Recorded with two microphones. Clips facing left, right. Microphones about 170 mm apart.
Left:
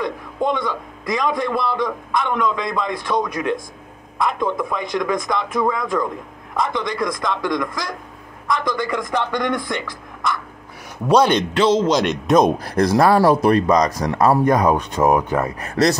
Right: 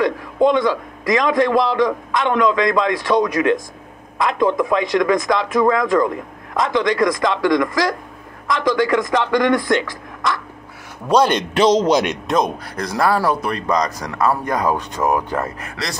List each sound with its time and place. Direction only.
0.0 s a man's voice: 90° right
11.2 s a man's voice: 15° right (ahead or behind)
12.9 s speech: 25° left (ahead or behind)
13.7 s speech: 25° left (ahead or behind)
15.6 s speech: 35° left (ahead or behind)